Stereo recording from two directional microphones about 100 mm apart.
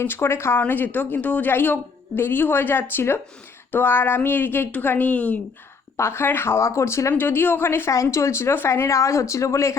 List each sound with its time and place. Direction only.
0.0 s speech: 25° left (ahead or behind)
6.0 s speech: 25° left (ahead or behind)